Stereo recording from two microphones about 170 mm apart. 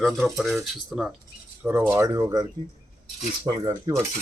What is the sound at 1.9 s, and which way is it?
Cutlery, 20° right (ahead or behind).